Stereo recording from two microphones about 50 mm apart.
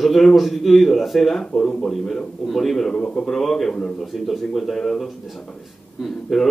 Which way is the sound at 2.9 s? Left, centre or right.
Left.